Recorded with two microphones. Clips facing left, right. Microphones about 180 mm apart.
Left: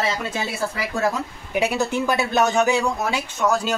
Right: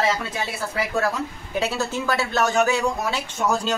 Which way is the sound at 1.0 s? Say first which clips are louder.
Left 2 dB; 15° left (ahead or behind).